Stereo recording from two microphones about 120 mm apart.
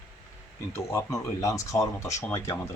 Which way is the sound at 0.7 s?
25° left (ahead or behind).